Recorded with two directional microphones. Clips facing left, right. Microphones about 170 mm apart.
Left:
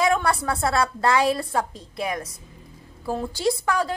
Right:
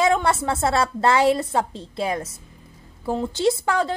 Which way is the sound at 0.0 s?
25° right (ahead or behind).